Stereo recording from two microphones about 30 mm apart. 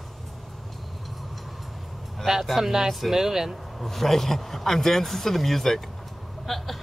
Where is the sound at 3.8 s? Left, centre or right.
Centre.